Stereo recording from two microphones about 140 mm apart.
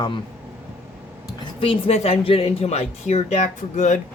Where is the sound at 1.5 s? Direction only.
40° left (ahead or behind).